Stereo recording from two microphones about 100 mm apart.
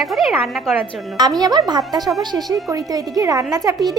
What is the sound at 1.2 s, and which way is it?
Speech, 40° right (ahead or behind).